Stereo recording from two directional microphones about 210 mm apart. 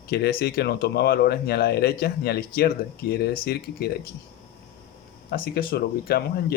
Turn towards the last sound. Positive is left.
turn(degrees=50)  # may be behind; listen again after turning